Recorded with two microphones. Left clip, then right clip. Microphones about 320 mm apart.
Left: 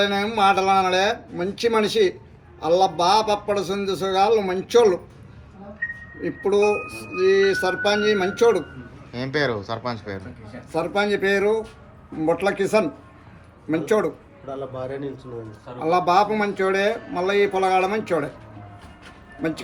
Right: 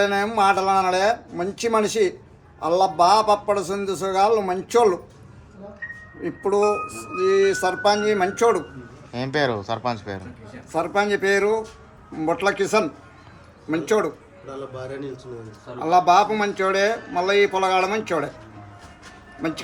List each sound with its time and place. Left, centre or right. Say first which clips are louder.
0.0 s a man's voice: even; centre
6.2 s a man's voice: left 1 dB; centre
9.1 s speech: right 1 dB; right
10.7 s speech: right 1 dB; centre
14.4 s a man's voice: left 3 dB; left
15.8 s speech: right 2 dB; centre